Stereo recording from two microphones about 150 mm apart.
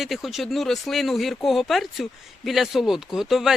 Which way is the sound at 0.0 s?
Centre (ahead or behind).